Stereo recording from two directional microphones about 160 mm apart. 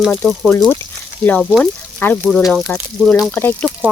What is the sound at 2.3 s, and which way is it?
Speech, centre (ahead or behind).